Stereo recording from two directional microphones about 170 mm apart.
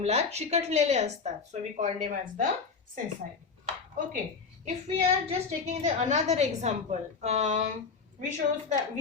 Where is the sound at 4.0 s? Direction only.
50° right (ahead or behind).